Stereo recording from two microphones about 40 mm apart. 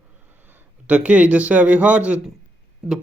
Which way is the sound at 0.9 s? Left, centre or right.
Right.